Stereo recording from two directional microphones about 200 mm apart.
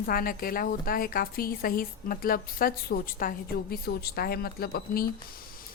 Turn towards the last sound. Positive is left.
turn(degrees=50)  # may be behind; listen again after turning